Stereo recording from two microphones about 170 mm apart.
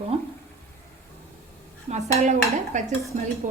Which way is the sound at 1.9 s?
40° right (ahead or behind).